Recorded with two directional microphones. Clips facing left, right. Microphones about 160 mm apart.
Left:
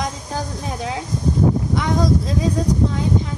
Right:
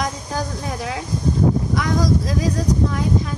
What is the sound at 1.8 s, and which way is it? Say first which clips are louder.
Speech: left 1 dB; 25° left (ahead or behind).